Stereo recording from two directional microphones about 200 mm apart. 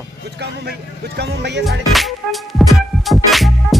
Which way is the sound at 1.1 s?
60° right (ahead or behind).